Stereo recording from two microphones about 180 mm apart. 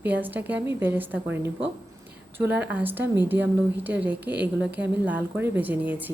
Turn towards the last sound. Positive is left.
turn(degrees=-10)  # may be behind; listen again after turning